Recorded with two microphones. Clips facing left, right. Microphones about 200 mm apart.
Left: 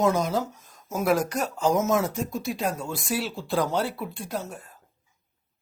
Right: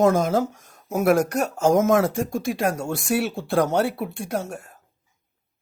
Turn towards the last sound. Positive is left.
turn(degrees=-70)  # may be behind; listen again after turning